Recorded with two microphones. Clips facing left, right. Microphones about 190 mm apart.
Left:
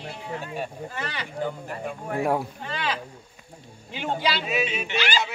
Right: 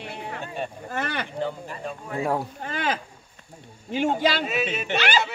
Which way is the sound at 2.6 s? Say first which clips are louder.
Right 2 dB; 45° right (ahead or behind).